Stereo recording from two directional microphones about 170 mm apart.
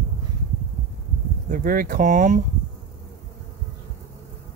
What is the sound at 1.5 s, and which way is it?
Speech, 55° right (ahead or behind).